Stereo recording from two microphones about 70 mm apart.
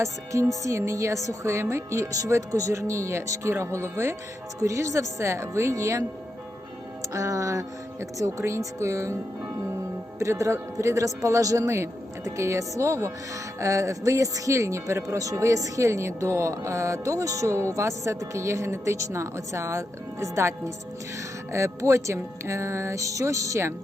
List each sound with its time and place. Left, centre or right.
0.0 s speech: right
4.6 s speech: right
7.1 s speech: right
10.2 s speech: right
21.5 s speech: right